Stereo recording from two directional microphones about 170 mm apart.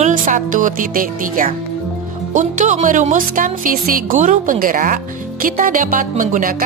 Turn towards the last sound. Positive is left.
turn(degrees=-55)  # may be behind; listen again after turning